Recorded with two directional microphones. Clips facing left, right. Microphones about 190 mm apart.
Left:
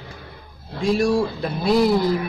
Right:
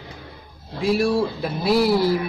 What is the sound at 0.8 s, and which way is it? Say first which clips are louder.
Speech: left 1 dB; 5° right (ahead or behind).